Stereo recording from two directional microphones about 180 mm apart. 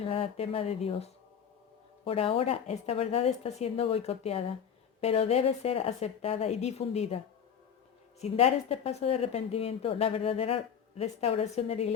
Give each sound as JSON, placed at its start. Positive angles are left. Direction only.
{"t": 0.0, "sound": "a woman's voice", "side_deg": 35}
{"t": 8.2, "sound": "a woman's voice", "side_deg": 35}